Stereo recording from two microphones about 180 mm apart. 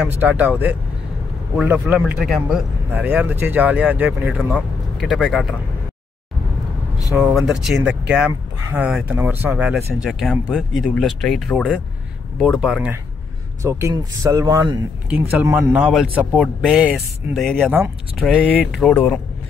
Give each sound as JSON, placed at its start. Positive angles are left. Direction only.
{"t": 0.2, "sound": "speech", "side_deg": -10}
{"t": 7.2, "sound": "speech", "side_deg": 0}
{"t": 13.6, "sound": "speech", "side_deg": -15}
{"t": 15.0, "sound": "speech", "side_deg": -5}
{"t": 18.9, "sound": "speech", "side_deg": 10}